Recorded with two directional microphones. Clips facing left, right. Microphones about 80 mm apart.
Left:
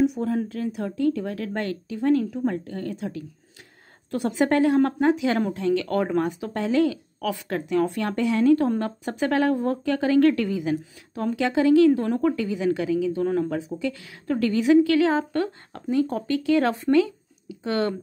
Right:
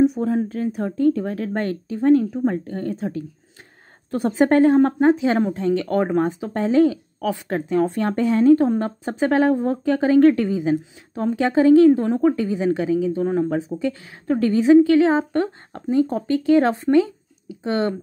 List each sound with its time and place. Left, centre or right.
0.0 s speech: right